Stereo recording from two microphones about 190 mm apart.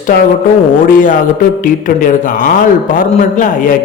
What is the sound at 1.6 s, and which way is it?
A man's voice, 45° left (ahead or behind).